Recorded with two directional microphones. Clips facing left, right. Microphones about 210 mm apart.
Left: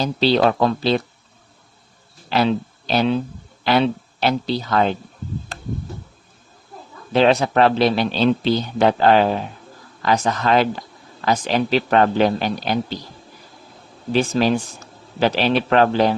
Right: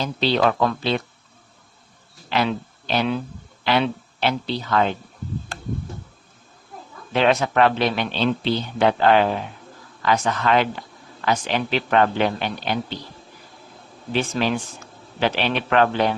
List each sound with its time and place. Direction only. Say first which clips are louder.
0.0 s speech: left 3 dB; 35° left (ahead or behind)
2.3 s a man's voice: left 4 dB; 35° left (ahead or behind)
7.1 s speech: left 3 dB; 35° left (ahead or behind)
14.1 s speech: left 5 dB; 40° left (ahead or behind)